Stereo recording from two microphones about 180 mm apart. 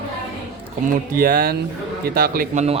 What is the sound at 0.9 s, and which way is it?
Speech, 55° right (ahead or behind).